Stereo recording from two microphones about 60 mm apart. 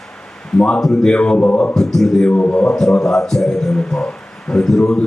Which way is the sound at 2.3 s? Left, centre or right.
Left.